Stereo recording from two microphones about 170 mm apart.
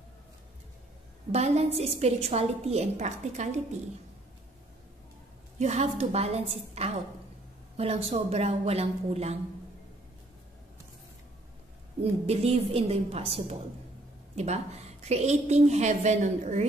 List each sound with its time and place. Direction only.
1.3 s a woman's voice: 40° right (ahead or behind)
5.6 s a woman's voice: 40° right (ahead or behind)
12.0 s a woman's voice: 35° right (ahead or behind)